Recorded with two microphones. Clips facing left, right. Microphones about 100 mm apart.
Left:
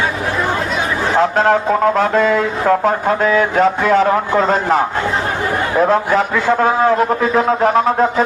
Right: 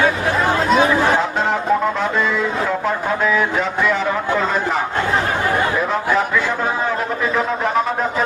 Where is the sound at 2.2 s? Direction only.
55° left (ahead or behind).